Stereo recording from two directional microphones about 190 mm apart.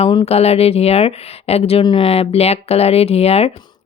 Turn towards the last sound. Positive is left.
turn(degrees=30)  # may be behind; listen again after turning